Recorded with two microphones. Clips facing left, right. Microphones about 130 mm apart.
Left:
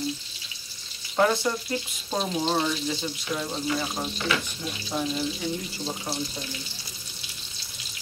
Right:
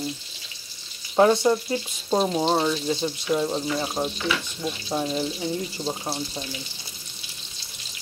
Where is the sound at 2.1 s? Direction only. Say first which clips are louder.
Right 5 dB; 35° right (ahead or behind).